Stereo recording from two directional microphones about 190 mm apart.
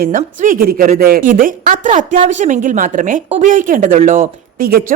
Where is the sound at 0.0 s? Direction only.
45° right (ahead or behind).